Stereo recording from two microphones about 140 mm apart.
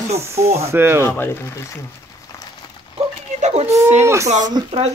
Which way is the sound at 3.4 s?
50° right (ahead or behind).